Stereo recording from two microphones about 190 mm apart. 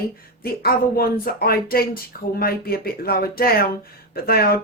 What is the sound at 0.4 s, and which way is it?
Speech, 50° left (ahead or behind).